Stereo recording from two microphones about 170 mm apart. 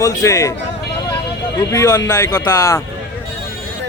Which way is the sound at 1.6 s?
20° left (ahead or behind).